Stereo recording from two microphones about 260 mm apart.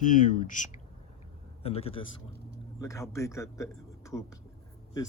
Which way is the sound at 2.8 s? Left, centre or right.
Centre.